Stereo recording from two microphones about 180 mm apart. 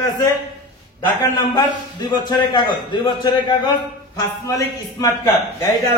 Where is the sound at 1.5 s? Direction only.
25° left (ahead or behind).